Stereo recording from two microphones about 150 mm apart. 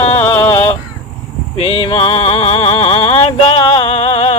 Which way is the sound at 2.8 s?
40° left (ahead or behind).